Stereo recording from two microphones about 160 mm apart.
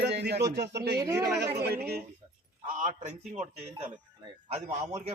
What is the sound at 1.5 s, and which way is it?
Speech, 85° right.